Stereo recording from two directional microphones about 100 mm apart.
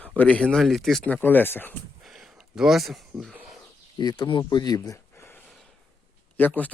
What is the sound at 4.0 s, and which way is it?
Speech, 45° left (ahead or behind).